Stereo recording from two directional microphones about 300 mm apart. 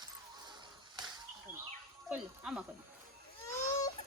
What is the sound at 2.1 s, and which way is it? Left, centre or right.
Speech, centre.